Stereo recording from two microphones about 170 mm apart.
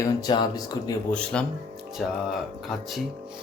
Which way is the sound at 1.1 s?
5° left (ahead or behind).